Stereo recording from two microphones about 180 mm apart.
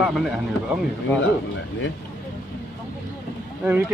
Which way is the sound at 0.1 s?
5° right (ahead or behind).